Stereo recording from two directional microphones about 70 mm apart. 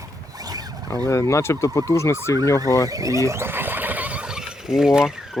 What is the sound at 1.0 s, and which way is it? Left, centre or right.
Speech, left.